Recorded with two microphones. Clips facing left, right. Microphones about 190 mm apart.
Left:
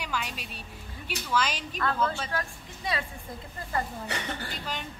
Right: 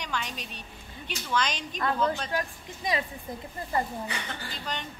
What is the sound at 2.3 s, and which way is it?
Speech, 15° right (ahead or behind).